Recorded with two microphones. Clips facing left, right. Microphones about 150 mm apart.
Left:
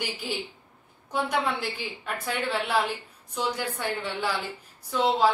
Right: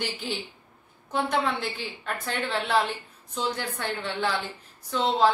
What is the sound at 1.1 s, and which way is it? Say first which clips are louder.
A woman's voice: right 1 dB; 10° left (ahead or behind).